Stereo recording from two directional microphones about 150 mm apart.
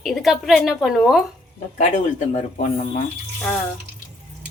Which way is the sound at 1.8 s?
50° left (ahead or behind).